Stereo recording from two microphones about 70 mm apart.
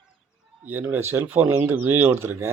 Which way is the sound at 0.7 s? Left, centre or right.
Right.